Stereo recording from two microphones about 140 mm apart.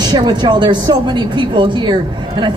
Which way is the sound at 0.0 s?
30° right (ahead or behind).